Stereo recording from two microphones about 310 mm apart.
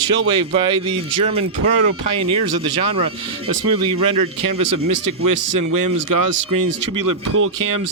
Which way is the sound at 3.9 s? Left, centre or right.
Right.